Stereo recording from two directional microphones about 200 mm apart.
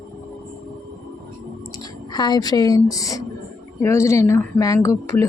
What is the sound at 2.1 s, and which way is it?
A woman's voice, 20° left (ahead or behind).